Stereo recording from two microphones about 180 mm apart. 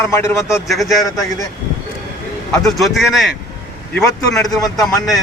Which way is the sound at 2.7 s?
Centre (ahead or behind).